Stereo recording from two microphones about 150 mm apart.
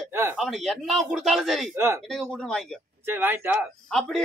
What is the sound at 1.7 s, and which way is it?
Speech, 15° right (ahead or behind).